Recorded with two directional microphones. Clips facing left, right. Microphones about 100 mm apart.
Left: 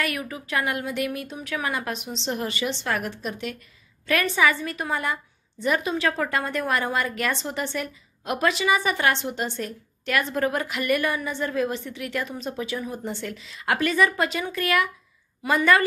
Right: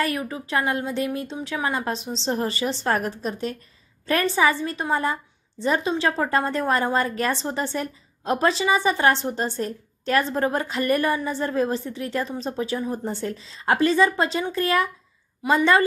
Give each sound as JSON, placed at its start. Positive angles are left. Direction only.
{"t": 0.0, "sound": "a woman's voice", "side_deg": -30}